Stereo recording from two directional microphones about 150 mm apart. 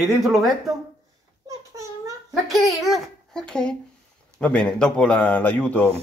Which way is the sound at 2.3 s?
Centre (ahead or behind).